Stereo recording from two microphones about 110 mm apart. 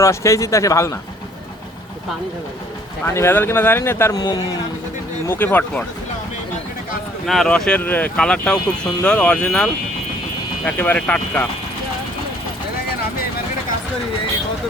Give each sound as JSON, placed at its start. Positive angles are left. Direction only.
{"t": 0.0, "sound": "speech", "side_deg": 25}
{"t": 3.1, "sound": "speech", "side_deg": 25}
{"t": 4.1, "sound": "a man's voice", "side_deg": 35}
{"t": 5.3, "sound": "speech", "side_deg": 20}
{"t": 7.3, "sound": "speech", "side_deg": 5}
{"t": 10.7, "sound": "speech", "side_deg": 15}